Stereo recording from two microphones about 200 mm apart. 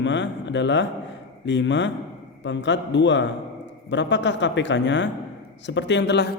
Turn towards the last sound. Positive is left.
turn(degrees=55)  # may be behind; listen again after turning